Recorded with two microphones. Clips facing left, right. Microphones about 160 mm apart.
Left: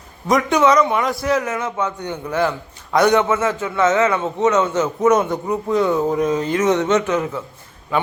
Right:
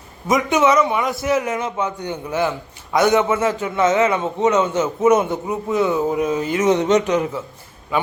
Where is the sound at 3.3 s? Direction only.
30° right (ahead or behind).